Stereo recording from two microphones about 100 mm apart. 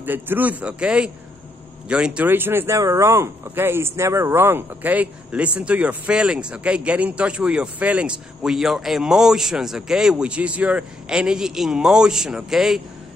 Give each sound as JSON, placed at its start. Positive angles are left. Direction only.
{"t": 0.0, "sound": "speech", "side_deg": -20}
{"t": 2.2, "sound": "speech", "side_deg": -20}